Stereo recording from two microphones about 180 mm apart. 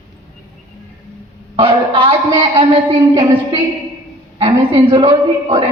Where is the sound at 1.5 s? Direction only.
30° right (ahead or behind).